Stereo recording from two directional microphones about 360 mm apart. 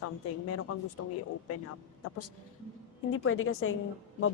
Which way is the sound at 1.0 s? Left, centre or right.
Left.